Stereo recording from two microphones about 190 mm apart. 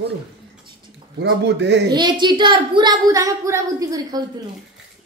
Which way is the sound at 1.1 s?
65° right (ahead or behind).